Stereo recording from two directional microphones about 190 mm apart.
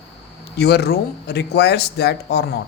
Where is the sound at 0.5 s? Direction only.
60° left (ahead or behind).